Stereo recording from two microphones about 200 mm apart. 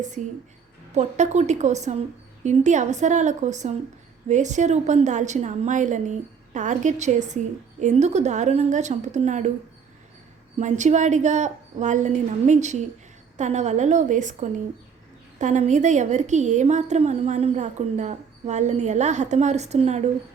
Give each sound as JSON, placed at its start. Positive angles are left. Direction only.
{"t": 0.0, "sound": "a woman's voice", "side_deg": -35}
{"t": 10.6, "sound": "a woman's voice", "side_deg": -35}